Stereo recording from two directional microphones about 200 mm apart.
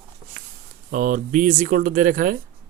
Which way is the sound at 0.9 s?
40° right (ahead or behind).